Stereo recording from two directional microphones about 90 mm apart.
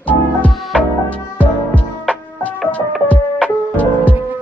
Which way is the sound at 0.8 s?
15° left (ahead or behind).